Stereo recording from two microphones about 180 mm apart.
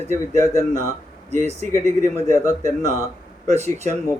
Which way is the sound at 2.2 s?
15° left (ahead or behind).